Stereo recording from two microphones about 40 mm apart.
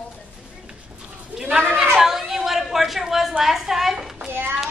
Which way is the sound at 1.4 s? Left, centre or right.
Centre.